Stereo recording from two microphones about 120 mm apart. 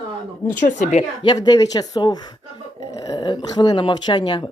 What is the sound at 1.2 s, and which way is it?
Speech, 35° left (ahead or behind).